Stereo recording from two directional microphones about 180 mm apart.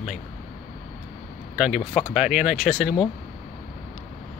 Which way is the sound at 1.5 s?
5° right (ahead or behind).